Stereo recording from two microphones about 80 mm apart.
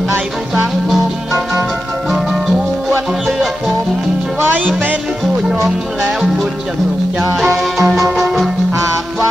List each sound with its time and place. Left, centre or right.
2.0 s music: centre
4.5 s music: right
7.3 s music: centre